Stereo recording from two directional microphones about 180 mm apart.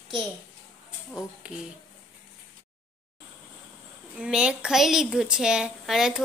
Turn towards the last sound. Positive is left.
turn(degrees=0)  # may be behind; listen again after turning